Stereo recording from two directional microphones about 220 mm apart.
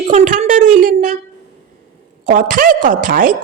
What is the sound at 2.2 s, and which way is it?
A woman's voice, 40° right (ahead or behind).